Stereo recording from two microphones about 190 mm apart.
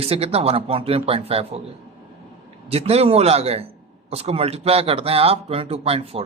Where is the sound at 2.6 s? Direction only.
30° right (ahead or behind).